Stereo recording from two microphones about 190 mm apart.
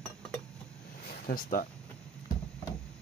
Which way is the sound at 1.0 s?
50° left (ahead or behind).